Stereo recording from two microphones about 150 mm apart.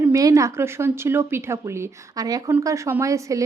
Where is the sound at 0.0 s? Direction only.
20° right (ahead or behind).